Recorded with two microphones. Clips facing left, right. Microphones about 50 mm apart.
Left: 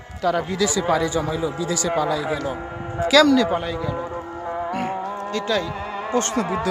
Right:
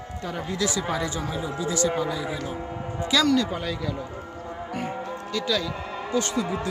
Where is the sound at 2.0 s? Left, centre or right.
Left.